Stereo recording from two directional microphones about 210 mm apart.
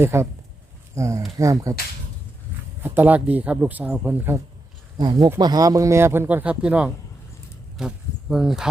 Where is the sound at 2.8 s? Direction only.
10° right (ahead or behind).